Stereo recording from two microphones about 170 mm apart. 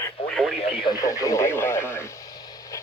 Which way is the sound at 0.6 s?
30° left (ahead or behind).